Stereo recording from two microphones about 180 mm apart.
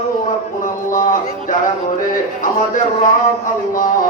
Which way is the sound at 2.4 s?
45° left (ahead or behind).